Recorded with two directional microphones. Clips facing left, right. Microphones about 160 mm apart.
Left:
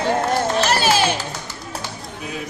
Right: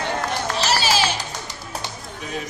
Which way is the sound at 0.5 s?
55° left (ahead or behind).